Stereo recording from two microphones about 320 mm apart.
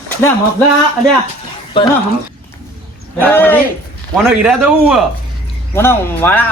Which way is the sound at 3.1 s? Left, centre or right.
Centre.